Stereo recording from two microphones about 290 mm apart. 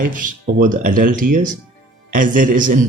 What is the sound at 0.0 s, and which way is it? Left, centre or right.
A man's voice, right.